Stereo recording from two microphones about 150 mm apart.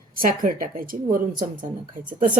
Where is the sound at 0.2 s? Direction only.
65° right (ahead or behind).